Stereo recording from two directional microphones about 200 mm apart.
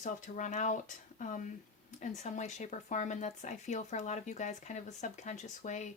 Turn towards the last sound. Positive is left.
turn(degrees=35)  # may be behind; listen again after turning